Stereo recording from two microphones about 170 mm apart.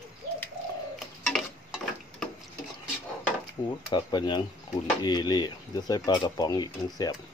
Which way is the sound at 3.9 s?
25° left (ahead or behind).